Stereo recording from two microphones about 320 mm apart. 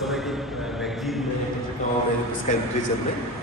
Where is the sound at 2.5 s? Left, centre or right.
Left.